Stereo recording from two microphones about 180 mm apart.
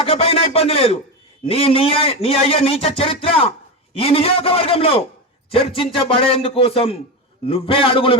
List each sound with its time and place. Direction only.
0.0 s a man's voice: 35° left (ahead or behind)